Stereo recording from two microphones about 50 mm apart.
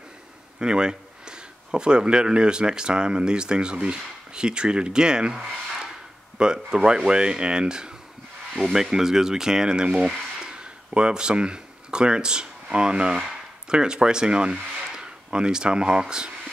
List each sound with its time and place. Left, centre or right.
0.6 s speech: centre
10.4 s a sound: centre
12.7 s speech: centre